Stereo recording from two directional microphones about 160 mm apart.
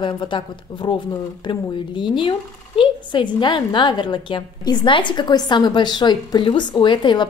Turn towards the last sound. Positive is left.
turn(degrees=30)  # may be behind; listen again after turning